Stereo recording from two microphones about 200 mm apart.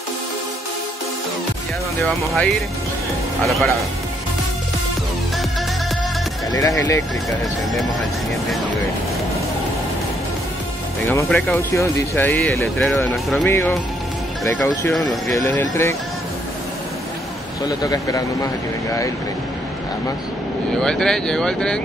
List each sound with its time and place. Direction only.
2.0 s speech: 5° left (ahead or behind)
6.5 s a man's voice: 15° left (ahead or behind)
11.1 s a man's voice: 10° left (ahead or behind)
17.6 s a man's voice: 15° left (ahead or behind)
20.8 s speech: 5° left (ahead or behind)